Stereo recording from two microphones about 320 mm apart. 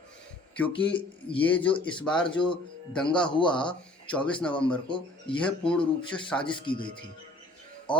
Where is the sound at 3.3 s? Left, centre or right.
Centre.